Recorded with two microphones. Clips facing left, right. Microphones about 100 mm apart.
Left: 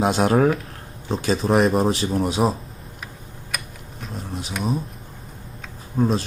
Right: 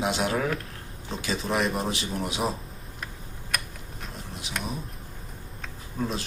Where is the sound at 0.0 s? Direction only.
45° left (ahead or behind).